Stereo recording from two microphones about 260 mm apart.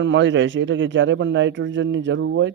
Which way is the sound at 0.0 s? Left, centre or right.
Right.